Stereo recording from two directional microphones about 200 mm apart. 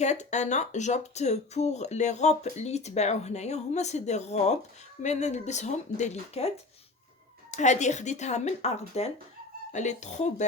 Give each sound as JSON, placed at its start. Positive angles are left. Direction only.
{"t": 0.0, "sound": "speech", "side_deg": 35}
{"t": 7.5, "sound": "speech", "side_deg": 35}